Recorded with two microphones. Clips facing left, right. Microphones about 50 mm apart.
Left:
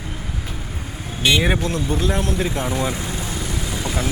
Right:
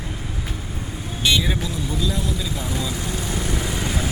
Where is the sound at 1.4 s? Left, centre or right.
Left.